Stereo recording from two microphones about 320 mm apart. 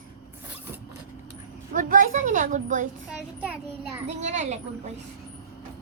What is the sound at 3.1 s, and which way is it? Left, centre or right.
Speech, centre.